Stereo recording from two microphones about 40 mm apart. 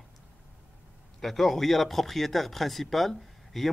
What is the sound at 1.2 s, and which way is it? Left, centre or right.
Speech, centre.